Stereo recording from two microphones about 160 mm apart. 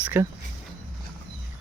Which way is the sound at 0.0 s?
15° right (ahead or behind).